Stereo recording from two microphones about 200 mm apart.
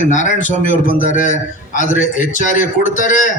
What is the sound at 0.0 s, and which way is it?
Speech, 40° left (ahead or behind).